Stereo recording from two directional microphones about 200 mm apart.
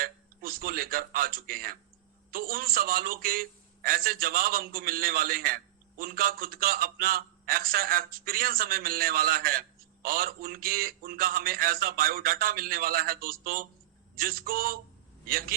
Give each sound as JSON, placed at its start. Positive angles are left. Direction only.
{"t": 0.0, "sound": "a man's voice", "side_deg": -45}